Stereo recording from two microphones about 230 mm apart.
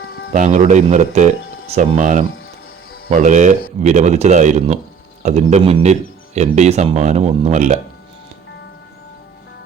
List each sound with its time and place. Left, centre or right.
0.0 s music: left
0.3 s speech: right